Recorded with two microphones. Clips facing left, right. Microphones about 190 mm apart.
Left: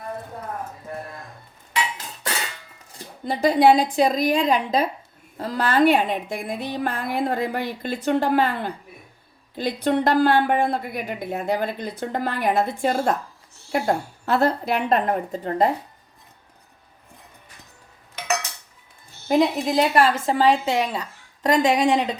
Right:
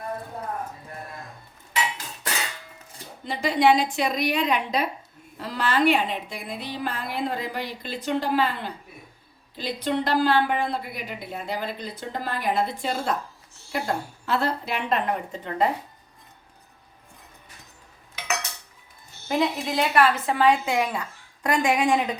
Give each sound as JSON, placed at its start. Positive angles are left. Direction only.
{"t": 3.2, "sound": "a woman's voice", "side_deg": 40}
{"t": 19.3, "sound": "speech", "side_deg": 40}